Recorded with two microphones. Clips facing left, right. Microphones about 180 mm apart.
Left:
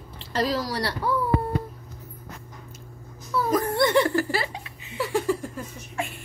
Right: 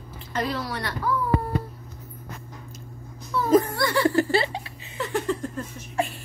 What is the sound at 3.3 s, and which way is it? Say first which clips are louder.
Music: left 1 dB; 5° left (ahead or behind).